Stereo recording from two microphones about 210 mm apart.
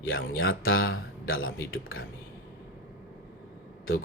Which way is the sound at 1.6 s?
70° left (ahead or behind).